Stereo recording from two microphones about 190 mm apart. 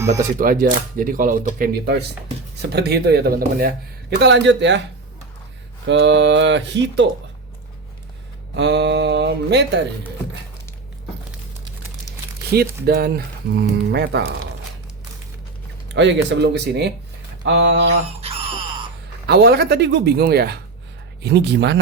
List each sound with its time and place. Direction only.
0.1 s speech: 45° right (ahead or behind)
2.6 s speech: 60° right (ahead or behind)
5.8 s speech: 70° right (ahead or behind)
8.5 s speech: 65° right (ahead or behind)
12.5 s speech: 55° right (ahead or behind)
16.0 s speech: 70° right (ahead or behind)
17.4 s speech: 75° right (ahead or behind)
19.3 s speech: 60° right (ahead or behind)